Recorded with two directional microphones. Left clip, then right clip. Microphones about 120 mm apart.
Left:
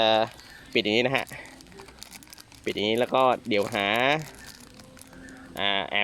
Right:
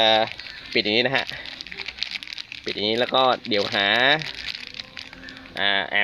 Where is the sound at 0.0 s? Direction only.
15° left (ahead or behind).